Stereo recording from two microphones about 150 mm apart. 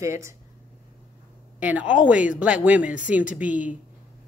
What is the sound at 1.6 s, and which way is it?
Speech, 10° right (ahead or behind).